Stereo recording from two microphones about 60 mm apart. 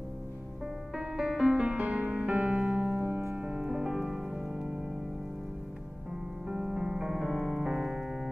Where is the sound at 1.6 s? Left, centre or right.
Centre.